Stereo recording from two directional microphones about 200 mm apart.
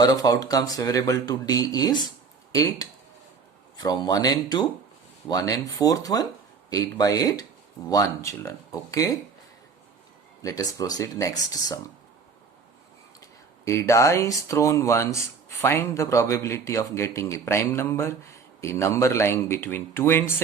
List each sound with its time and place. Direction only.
0.0 s speech: 20° left (ahead or behind)
10.4 s speech: 15° left (ahead or behind)
13.7 s speech: 15° left (ahead or behind)